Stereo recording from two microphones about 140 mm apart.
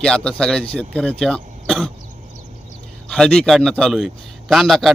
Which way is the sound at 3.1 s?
5° left (ahead or behind).